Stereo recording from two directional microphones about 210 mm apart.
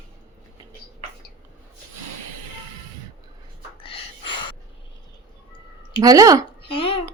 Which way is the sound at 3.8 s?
25° left (ahead or behind).